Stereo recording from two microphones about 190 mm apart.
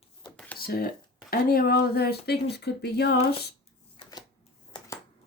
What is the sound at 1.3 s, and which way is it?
Speech, 50° left (ahead or behind).